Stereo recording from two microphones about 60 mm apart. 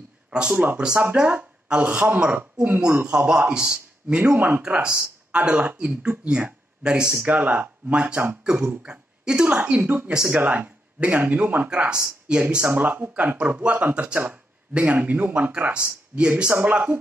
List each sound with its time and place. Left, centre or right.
0.3 s a man's voice: centre
3.1 s a man's voice: centre
4.2 s speech: right
4.6 s a man's voice: centre
9.7 s speech: right
12.6 s speech: right